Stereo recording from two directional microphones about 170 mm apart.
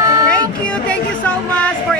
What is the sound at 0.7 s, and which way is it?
Speech, 5° left (ahead or behind).